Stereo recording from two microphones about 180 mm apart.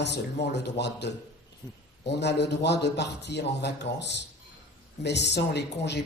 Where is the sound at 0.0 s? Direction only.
70° left (ahead or behind).